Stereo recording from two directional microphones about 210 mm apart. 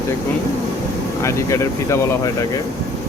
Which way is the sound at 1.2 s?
15° left (ahead or behind).